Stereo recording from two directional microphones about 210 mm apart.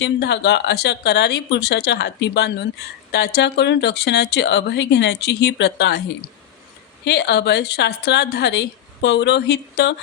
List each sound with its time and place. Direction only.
0.0 s a woman's voice: 55° left (ahead or behind)
7.0 s a woman's voice: 55° left (ahead or behind)